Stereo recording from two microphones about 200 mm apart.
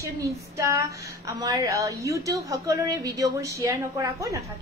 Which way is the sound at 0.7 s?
15° right (ahead or behind).